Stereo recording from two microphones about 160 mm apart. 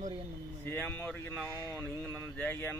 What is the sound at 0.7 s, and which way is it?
Speech, 15° left (ahead or behind).